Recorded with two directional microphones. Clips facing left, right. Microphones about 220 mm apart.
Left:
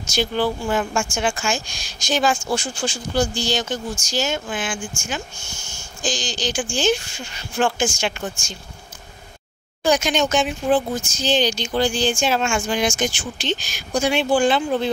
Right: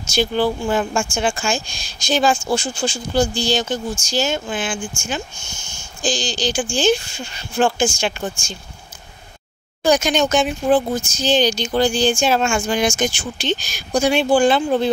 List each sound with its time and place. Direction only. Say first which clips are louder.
0.1 s speech: right 3 dB; 30° right (ahead or behind)
9.8 s speech: right 3 dB; 40° right (ahead or behind)